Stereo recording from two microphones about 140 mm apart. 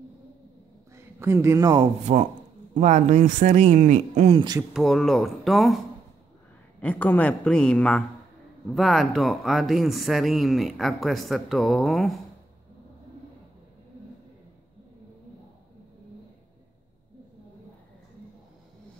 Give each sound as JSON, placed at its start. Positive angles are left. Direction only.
{"t": 0.9, "sound": "a woman's voice", "side_deg": -20}
{"t": 2.1, "sound": "speech", "side_deg": -50}
{"t": 4.7, "sound": "speech", "side_deg": 0}
{"t": 6.8, "sound": "a woman's voice", "side_deg": 10}